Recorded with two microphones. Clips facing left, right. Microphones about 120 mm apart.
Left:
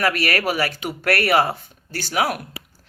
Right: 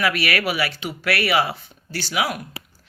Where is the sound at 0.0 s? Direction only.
45° left (ahead or behind).